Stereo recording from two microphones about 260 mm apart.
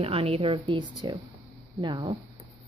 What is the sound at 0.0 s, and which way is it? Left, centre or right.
A woman's voice, right.